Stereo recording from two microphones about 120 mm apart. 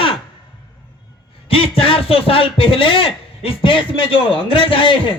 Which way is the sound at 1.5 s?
50° left (ahead or behind).